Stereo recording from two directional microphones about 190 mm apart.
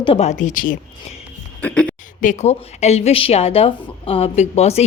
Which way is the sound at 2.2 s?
35° left (ahead or behind).